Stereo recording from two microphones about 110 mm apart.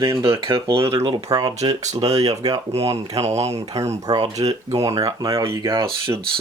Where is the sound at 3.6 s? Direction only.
30° right (ahead or behind).